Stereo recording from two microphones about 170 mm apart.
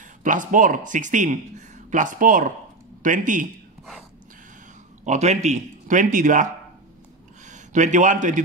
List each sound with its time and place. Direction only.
0.2 s speech: 50° right (ahead or behind)
5.0 s a man's voice: 45° right (ahead or behind)